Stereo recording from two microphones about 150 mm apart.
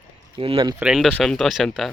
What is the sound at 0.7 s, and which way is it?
Speech, 5° right (ahead or behind).